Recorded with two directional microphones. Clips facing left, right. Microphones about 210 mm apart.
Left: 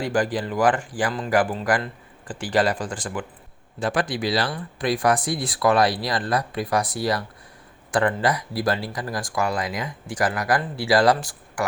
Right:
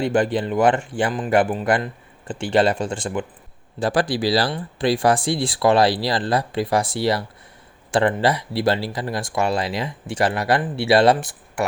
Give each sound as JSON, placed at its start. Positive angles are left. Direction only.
{"t": 0.0, "sound": "speech", "side_deg": -25}